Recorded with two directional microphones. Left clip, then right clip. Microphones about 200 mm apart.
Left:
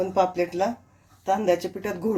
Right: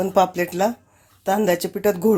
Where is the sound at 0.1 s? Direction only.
40° right (ahead or behind).